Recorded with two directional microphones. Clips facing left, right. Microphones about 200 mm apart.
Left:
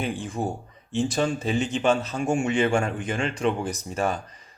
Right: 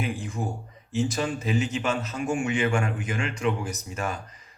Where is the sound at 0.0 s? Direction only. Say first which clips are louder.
Left 2 dB; 30° left (ahead or behind).